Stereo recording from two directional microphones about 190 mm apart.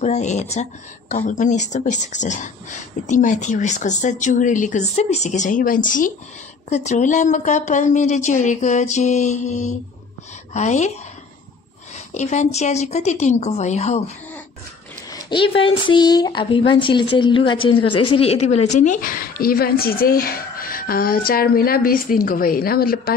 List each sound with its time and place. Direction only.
0.0 s speech: 35° left (ahead or behind)
12.1 s speech: 40° left (ahead or behind)
15.0 s a woman's voice: 25° left (ahead or behind); by 23.1 s 50° left (ahead or behind)